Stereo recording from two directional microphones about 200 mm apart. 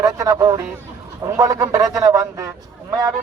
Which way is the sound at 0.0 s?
15° right (ahead or behind).